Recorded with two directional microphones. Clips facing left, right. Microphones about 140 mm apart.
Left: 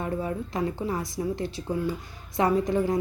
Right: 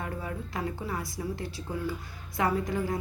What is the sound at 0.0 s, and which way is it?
A woman's voice, 25° left (ahead or behind).